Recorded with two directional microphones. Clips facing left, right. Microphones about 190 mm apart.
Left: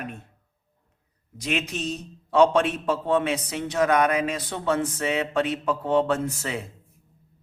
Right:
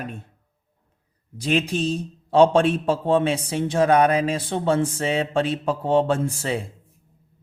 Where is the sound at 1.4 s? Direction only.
30° right (ahead or behind).